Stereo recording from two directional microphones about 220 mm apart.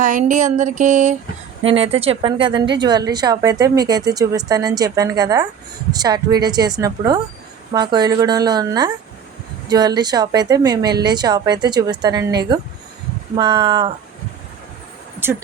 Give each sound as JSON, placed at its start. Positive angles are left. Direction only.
{"t": 0.0, "sound": "a sound", "side_deg": -35}
{"t": 1.6, "sound": "a woman's voice", "side_deg": -25}
{"t": 15.2, "sound": "a woman's voice", "side_deg": -10}